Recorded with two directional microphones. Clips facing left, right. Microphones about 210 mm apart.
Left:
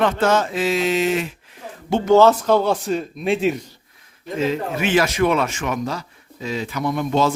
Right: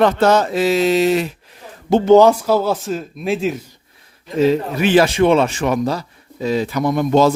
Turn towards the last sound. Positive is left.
turn(degrees=-40)  # may be behind; listen again after turning